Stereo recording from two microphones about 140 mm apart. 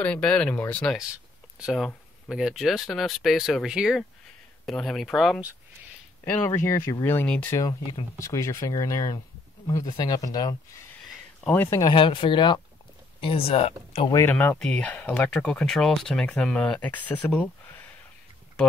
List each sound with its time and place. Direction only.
0.0 s speech: 10° left (ahead or behind)
1.6 s speech: centre (ahead or behind)
6.6 s speech: 20° left (ahead or behind)
7.5 s speech: 25° left (ahead or behind)
11.4 s speech: 15° left (ahead or behind)
11.9 s speech: 35° left (ahead or behind)
14.2 s speech: 15° left (ahead or behind)
17.4 s a sound: 15° left (ahead or behind)